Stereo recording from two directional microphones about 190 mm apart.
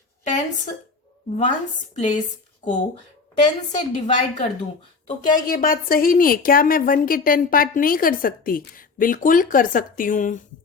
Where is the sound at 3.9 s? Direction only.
40° left (ahead or behind).